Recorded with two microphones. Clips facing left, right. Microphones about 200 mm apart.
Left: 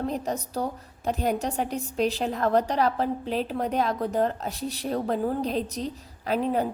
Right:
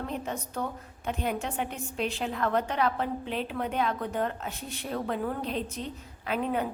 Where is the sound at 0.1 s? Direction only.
35° left (ahead or behind).